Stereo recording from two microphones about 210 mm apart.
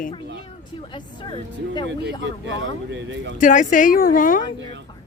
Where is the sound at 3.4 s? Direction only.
35° left (ahead or behind).